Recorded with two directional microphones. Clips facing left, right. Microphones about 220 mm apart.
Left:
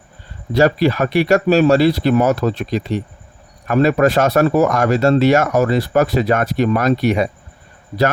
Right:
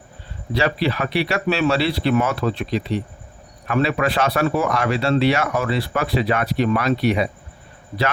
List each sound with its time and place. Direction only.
0.5 s speech: 45° left (ahead or behind)